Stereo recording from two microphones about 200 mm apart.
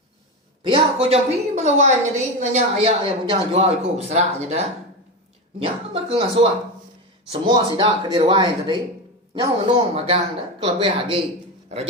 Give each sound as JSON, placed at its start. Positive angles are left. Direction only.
{"t": 0.6, "sound": "speech", "side_deg": -25}
{"t": 5.6, "sound": "speech", "side_deg": -30}